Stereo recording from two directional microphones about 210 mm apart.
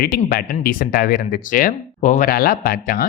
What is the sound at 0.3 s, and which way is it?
Speech, 45° left (ahead or behind).